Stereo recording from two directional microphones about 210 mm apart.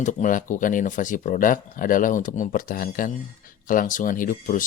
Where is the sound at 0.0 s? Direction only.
40° left (ahead or behind).